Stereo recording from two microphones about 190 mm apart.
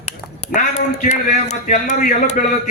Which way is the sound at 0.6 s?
40° left (ahead or behind).